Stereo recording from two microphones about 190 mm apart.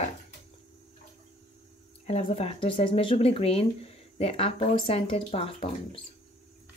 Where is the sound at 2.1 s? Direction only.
30° left (ahead or behind).